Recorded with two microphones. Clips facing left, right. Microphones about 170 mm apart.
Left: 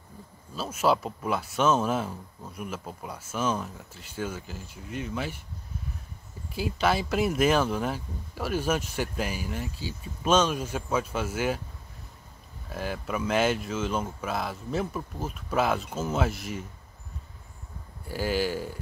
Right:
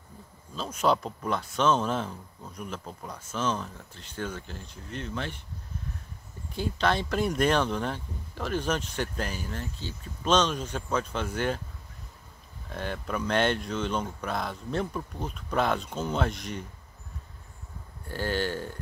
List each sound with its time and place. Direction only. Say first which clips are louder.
0.6 s speech: left 1 dB; 5° left (ahead or behind)
6.5 s speech: left 1 dB; 5° left (ahead or behind)
12.7 s speech: left 1 dB; 5° left (ahead or behind)
18.0 s speech: left 2 dB; 10° left (ahead or behind)